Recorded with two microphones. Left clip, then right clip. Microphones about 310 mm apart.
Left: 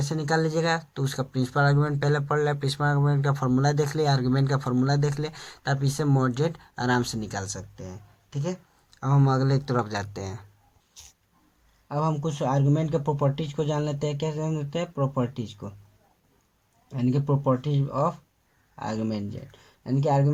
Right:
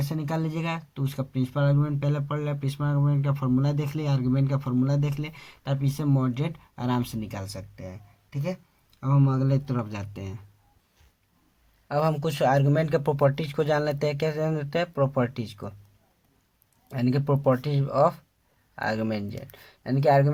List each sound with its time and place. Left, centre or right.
0.1 s speech: centre
9.0 s speech: centre
11.0 s a sound: left
11.9 s speech: right
17.0 s speech: right